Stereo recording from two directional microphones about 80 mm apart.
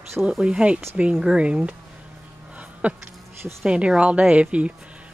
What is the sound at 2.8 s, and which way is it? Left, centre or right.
A woman's voice, centre.